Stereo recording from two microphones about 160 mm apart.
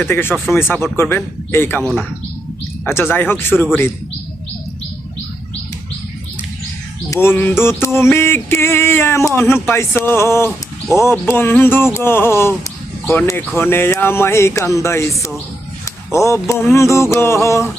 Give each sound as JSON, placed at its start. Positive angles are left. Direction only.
{"t": 0.0, "sound": "speech", "side_deg": 15}
{"t": 7.1, "sound": "speech", "side_deg": 15}